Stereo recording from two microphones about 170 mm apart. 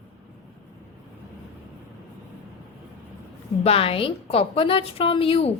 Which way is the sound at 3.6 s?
35° left (ahead or behind).